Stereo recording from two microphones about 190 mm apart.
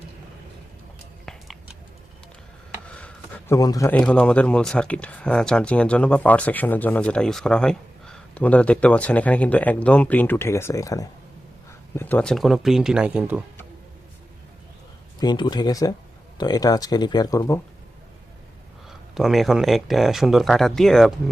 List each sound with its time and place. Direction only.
1.2 s a sound: centre (ahead or behind)
2.9 s a sound: 5° left (ahead or behind)
3.6 s speech: 20° left (ahead or behind)
3.9 s speech: 5° left (ahead or behind)
15.2 s speech: 20° left (ahead or behind)
18.9 s speech: centre (ahead or behind)